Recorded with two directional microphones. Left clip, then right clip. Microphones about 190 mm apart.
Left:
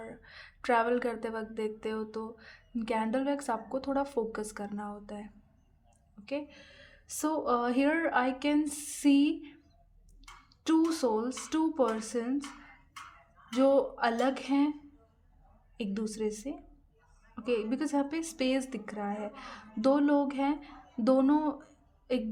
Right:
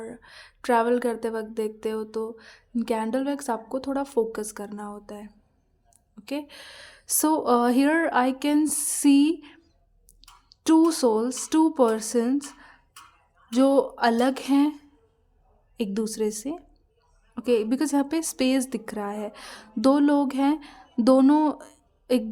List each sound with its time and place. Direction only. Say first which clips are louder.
0.0 s a woman's voice: right 6 dB; 25° right (ahead or behind)
6.2 s a woman's voice: right 4 dB; 40° right (ahead or behind)